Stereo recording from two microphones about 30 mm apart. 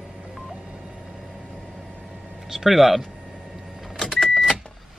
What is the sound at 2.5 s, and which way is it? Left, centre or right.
Speech, centre.